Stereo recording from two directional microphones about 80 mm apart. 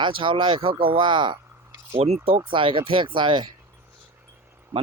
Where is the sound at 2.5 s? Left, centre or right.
Right.